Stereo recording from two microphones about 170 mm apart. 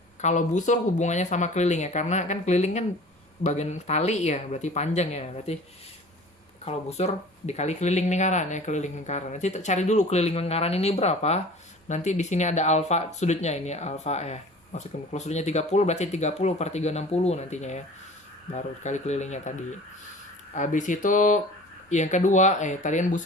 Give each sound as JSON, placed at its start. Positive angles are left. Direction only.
{"t": 0.2, "sound": "speech", "side_deg": 45}
{"t": 6.7, "sound": "speech", "side_deg": 40}
{"t": 20.6, "sound": "speech", "side_deg": 45}